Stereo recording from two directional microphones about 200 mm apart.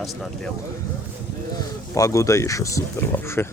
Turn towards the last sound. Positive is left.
turn(degrees=10)  # may be behind; listen again after turning